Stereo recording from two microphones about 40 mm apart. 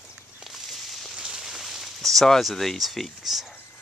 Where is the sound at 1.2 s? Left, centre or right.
Centre.